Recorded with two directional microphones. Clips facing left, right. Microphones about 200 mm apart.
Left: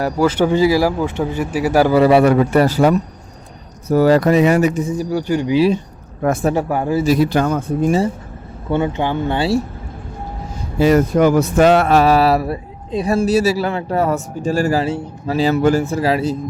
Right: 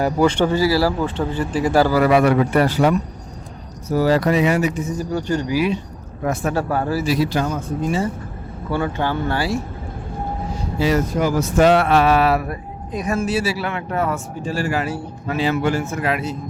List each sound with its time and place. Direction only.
0.0 s speech: 5° left (ahead or behind)
0.5 s a man's voice: 15° left (ahead or behind)
1.9 s a man's voice: 25° left (ahead or behind)
3.8 s speech: 55° left (ahead or behind)
4.9 s a man's voice: 10° left (ahead or behind)
7.0 s speech: 50° left (ahead or behind)
8.7 s speech: 20° left (ahead or behind)
10.8 s speech: 55° left (ahead or behind)
11.7 s a man's voice: 40° left (ahead or behind)
14.8 s speech: 25° left (ahead or behind)
15.4 s a man's voice: 40° left (ahead or behind)